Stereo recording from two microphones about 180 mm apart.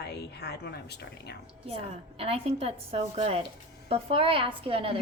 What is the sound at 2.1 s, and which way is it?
A woman's voice, 35° right (ahead or behind).